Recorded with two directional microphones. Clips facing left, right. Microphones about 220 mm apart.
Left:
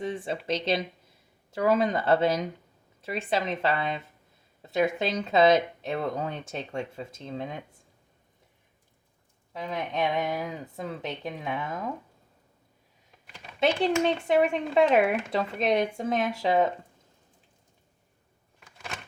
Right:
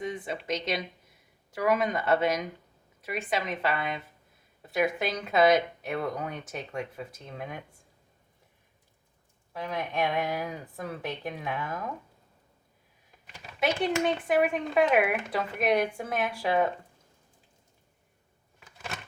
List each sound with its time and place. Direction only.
0.0 s speech: 30° left (ahead or behind)
9.5 s speech: 20° left (ahead or behind)
13.6 s speech: 25° left (ahead or behind)